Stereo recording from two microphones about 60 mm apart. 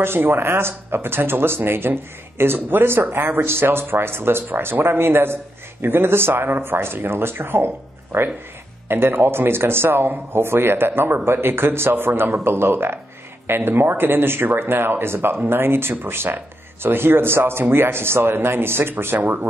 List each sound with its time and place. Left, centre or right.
0.0 s speech: right